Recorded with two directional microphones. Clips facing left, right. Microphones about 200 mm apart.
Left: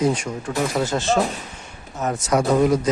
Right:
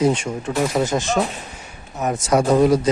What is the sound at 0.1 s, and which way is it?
Speech, 25° right (ahead or behind).